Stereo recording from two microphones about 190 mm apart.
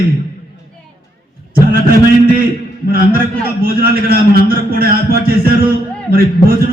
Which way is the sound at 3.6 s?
50° right (ahead or behind).